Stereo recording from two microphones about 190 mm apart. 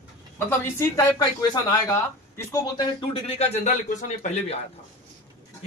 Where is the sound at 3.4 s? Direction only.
40° left (ahead or behind).